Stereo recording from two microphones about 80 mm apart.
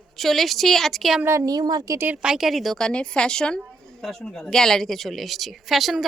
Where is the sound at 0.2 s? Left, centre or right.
Centre.